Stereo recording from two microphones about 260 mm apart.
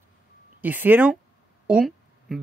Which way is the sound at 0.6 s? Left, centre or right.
Centre.